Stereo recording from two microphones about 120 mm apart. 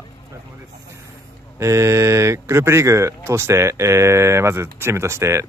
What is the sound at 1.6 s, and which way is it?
Speech, 25° right (ahead or behind).